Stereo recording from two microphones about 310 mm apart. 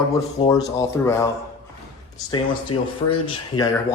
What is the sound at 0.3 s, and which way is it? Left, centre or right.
Speech, centre.